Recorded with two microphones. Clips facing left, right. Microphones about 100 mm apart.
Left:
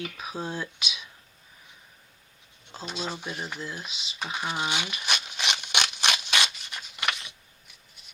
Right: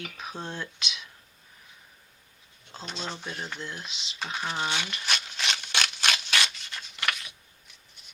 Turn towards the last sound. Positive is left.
turn(degrees=20)  # may be behind; listen again after turning